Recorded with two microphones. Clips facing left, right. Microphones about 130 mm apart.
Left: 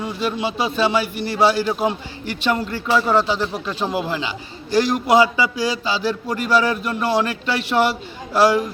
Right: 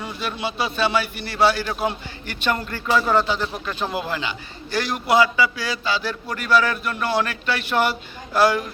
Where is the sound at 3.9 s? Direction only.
15° left (ahead or behind).